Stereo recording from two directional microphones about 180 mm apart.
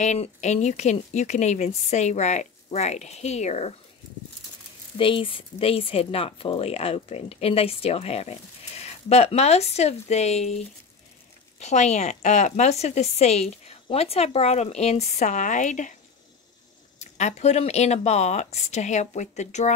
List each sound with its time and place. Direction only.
0.0 s speech: 40° left (ahead or behind)
4.9 s speech: 30° left (ahead or behind)
11.6 s speech: 40° left (ahead or behind)
17.0 s speech: 40° left (ahead or behind)